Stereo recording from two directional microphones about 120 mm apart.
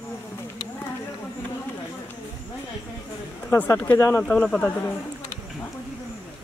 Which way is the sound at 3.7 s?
20° left (ahead or behind).